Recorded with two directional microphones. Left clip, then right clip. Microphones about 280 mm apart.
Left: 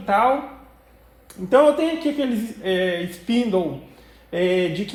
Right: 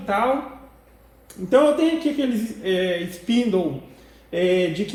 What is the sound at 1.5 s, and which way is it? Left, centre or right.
A woman's voice, left.